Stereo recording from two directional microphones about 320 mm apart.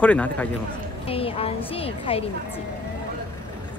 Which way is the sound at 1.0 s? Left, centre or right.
Centre.